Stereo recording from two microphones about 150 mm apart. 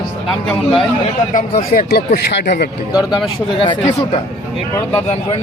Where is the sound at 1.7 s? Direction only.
80° left.